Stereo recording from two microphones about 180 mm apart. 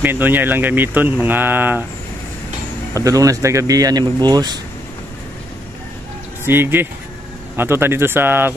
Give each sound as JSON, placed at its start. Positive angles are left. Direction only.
{"t": 0.0, "sound": "speech", "side_deg": -10}
{"t": 2.9, "sound": "speech", "side_deg": -20}
{"t": 6.4, "sound": "speech", "side_deg": -10}